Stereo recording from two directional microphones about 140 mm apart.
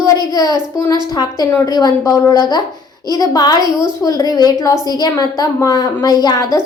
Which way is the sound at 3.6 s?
30° right (ahead or behind).